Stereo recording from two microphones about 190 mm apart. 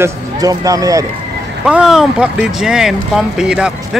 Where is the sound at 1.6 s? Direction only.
5° right (ahead or behind).